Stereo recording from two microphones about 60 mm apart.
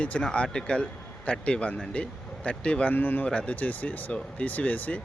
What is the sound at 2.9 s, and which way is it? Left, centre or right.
Speech, left.